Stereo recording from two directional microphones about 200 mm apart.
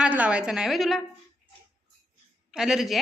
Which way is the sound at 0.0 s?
5° right (ahead or behind).